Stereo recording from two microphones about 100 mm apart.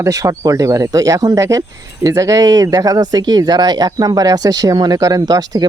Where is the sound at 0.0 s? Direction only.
35° right (ahead or behind).